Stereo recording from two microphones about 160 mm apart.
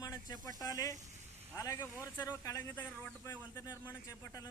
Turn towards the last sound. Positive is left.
turn(degrees=20)  # may be behind; listen again after turning